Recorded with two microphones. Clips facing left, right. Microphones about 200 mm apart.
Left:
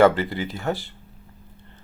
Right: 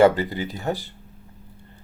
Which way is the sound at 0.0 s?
15° right (ahead or behind).